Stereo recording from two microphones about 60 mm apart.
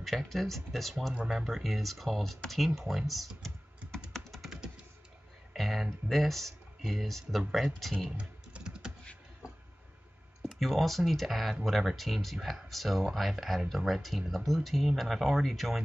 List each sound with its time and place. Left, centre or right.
0.0 s speech: centre
3.9 s computer keyboard: centre
5.5 s a sound: centre
6.9 s speech: centre
8.2 s typing: centre
10.5 s speech: centre